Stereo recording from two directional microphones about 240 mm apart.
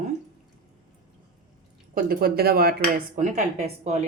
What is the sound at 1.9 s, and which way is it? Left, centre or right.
Speech, right.